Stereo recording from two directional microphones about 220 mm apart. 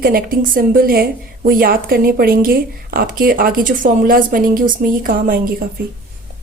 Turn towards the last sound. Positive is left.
turn(degrees=-40)  # may be behind; listen again after turning